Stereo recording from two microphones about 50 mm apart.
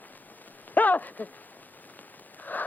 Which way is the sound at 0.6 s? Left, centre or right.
Left.